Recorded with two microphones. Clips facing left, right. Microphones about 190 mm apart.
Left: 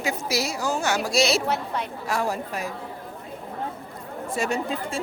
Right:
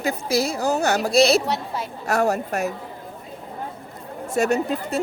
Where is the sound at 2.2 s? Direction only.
45° right (ahead or behind).